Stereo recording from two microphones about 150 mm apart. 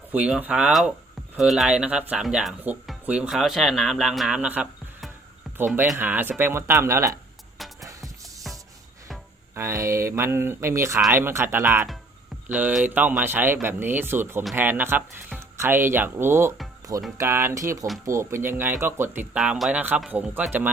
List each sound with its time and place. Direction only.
0.1 s speech: 10° right (ahead or behind)
7.6 s music: centre (ahead or behind)
9.6 s speech: 20° right (ahead or behind)
19.4 s speech: centre (ahead or behind)